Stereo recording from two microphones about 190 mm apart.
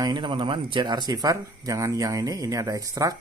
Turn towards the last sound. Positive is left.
turn(degrees=-20)  # may be behind; listen again after turning